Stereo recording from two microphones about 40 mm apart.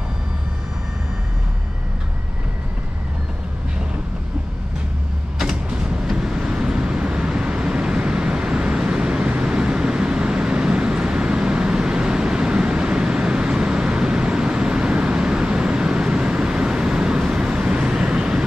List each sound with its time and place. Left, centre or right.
6.1 s vehicle: centre